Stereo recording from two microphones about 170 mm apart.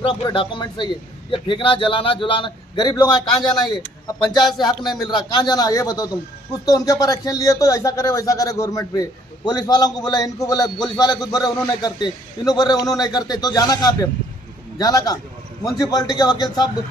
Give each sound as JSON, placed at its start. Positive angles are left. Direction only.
{"t": 0.0, "sound": "speech", "side_deg": 30}